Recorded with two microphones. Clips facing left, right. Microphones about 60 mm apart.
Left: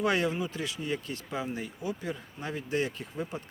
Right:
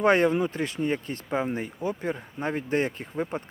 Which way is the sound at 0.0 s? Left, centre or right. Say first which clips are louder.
Right 7 dB; right.